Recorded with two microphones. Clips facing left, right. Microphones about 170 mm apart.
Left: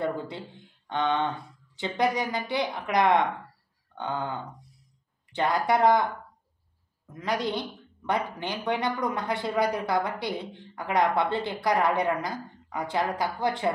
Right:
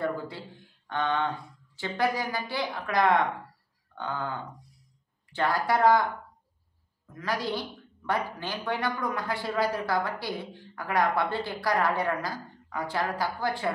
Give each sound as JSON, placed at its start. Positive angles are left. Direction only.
{"t": 0.0, "sound": "speech", "side_deg": 20}
{"t": 7.2, "sound": "speech", "side_deg": 20}